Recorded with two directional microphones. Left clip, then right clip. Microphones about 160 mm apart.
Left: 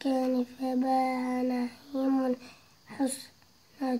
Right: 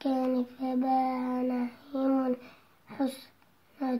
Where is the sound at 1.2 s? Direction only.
Centre (ahead or behind).